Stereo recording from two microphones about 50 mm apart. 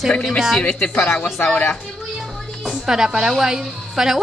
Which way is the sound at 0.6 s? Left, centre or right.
Left.